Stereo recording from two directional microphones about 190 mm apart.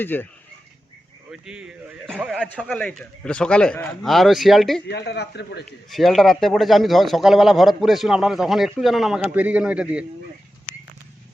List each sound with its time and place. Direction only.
0.0 s speech: 10° left (ahead or behind)
1.3 s speech: 5° right (ahead or behind)
4.9 s speech: 65° left (ahead or behind)
5.9 s speech: centre (ahead or behind)